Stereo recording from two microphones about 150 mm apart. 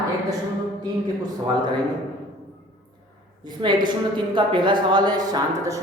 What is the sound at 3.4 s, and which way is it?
A woman's voice, 30° right (ahead or behind).